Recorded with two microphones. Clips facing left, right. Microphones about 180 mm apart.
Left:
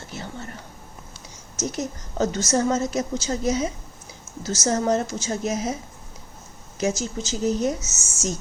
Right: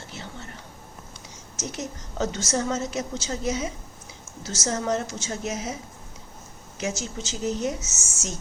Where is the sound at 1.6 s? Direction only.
40° left (ahead or behind).